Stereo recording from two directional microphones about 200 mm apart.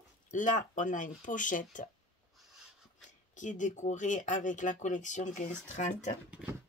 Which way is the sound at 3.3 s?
40° left (ahead or behind).